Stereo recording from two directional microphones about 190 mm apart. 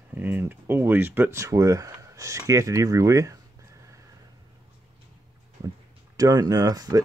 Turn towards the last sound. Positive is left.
turn(degrees=-20)  # may be behind; listen again after turning